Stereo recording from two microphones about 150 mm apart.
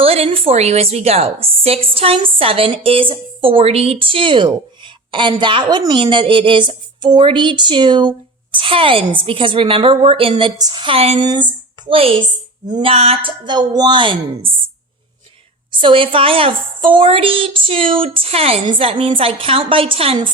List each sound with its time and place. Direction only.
0.0 s a woman's voice: 40° right (ahead or behind)
11.2 s speech: 30° right (ahead or behind)
12.6 s a sound: 30° right (ahead or behind)
12.9 s a woman's voice: 40° right (ahead or behind)
15.7 s a woman's voice: 35° right (ahead or behind)